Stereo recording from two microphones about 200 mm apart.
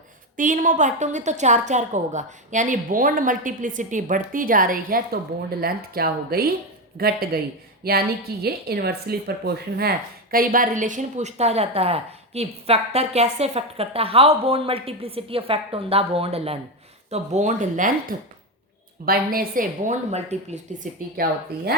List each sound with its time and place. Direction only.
0.3 s a woman's voice: 40° right (ahead or behind)
19.0 s a woman's voice: 45° right (ahead or behind)
21.2 s speech: 50° right (ahead or behind)